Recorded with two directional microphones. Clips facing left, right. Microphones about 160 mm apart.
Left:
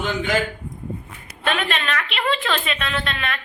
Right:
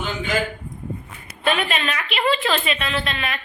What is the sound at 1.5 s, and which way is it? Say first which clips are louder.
A woman's voice: right 1 dB; 5° right (ahead or behind).